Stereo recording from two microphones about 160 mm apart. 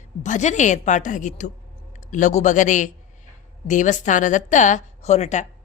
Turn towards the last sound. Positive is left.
turn(degrees=45)  # may be behind; listen again after turning